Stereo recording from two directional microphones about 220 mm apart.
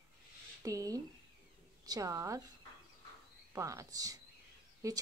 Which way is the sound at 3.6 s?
15° right (ahead or behind).